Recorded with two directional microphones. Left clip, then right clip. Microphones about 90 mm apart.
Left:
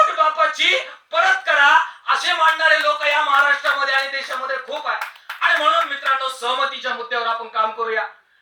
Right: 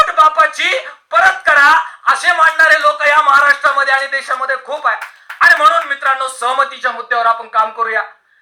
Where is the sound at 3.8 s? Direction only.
30° right (ahead or behind).